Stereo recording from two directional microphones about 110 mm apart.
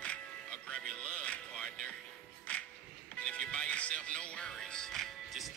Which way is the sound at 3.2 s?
10° left (ahead or behind).